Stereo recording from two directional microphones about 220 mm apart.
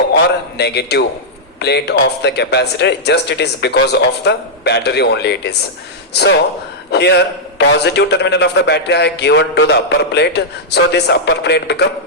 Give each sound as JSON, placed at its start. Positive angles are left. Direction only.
{"t": 0.5, "sound": "a man's voice", "side_deg": 50}